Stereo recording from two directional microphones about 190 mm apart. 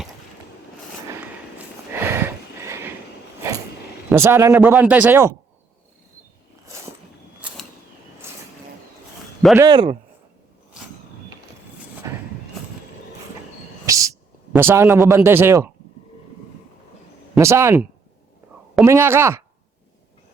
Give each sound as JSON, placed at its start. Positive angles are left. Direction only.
{"t": 1.2, "sound": "a sound", "side_deg": -10}
{"t": 4.1, "sound": "speech", "side_deg": -15}
{"t": 7.4, "sound": "a sound", "side_deg": -5}
{"t": 8.2, "sound": "vehicle", "side_deg": -15}
{"t": 9.6, "sound": "speech", "side_deg": -25}
{"t": 12.0, "sound": "a sound", "side_deg": -15}
{"t": 13.8, "sound": "speech", "side_deg": -15}
{"t": 17.3, "sound": "speech", "side_deg": -15}
{"t": 18.9, "sound": "speech", "side_deg": -10}